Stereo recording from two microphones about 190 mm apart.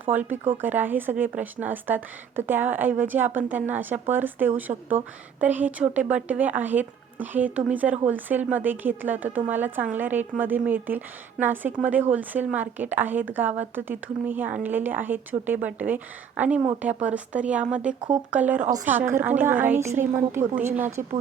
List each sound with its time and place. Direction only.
0.0 s speech: 10° right (ahead or behind)